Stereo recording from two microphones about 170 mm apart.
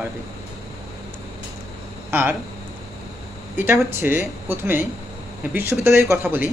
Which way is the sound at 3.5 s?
15° right (ahead or behind).